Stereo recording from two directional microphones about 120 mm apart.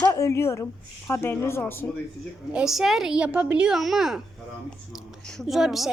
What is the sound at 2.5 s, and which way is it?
A woman's voice, 5° right (ahead or behind).